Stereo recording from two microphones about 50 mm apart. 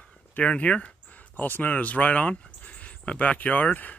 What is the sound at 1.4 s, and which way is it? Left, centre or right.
Speech, left.